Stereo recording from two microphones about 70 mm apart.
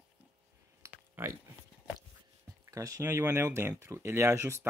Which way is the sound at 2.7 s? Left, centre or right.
Right.